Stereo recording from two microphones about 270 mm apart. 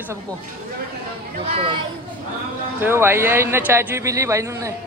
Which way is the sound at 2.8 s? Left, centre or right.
Centre.